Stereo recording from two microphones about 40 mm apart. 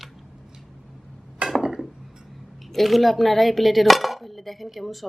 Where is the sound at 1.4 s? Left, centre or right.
Right.